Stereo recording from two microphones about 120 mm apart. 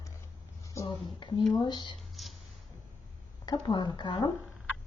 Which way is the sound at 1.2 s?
40° left (ahead or behind).